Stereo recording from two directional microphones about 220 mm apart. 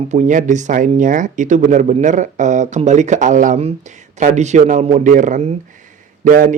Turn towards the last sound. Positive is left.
turn(degrees=-35)  # may be behind; listen again after turning